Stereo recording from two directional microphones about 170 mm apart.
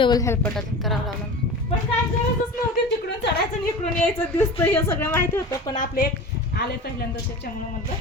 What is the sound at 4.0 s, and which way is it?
Speech, 5° left (ahead or behind).